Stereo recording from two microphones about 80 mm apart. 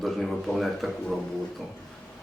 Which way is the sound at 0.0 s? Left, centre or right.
Centre.